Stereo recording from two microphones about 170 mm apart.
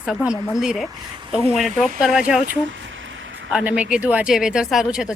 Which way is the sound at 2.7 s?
90° right.